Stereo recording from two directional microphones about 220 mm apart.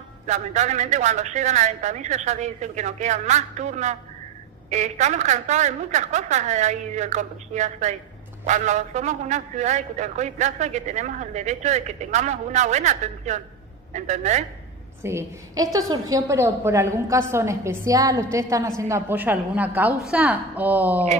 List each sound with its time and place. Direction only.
0.3 s a man's voice: 30° right (ahead or behind)
15.0 s a woman's voice: 15° right (ahead or behind)